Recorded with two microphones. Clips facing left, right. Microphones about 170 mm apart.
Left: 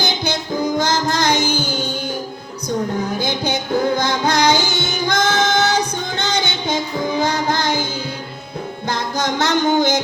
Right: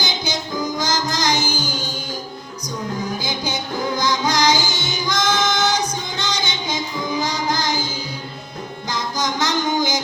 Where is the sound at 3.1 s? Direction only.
60° left (ahead or behind).